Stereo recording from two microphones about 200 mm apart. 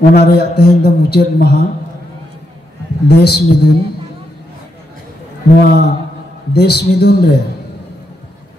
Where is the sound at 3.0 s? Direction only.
55° left (ahead or behind).